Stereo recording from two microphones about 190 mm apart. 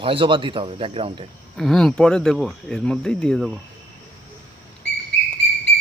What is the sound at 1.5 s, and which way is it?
Speech, centre (ahead or behind).